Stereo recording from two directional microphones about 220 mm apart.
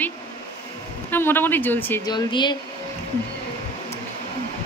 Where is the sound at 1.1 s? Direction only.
10° left (ahead or behind).